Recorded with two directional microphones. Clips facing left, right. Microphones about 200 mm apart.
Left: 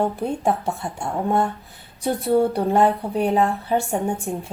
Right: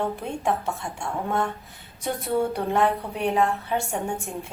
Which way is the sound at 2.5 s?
35° left (ahead or behind).